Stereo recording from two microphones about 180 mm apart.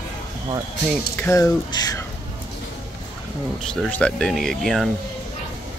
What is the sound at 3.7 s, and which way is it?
Speech, 5° left (ahead or behind).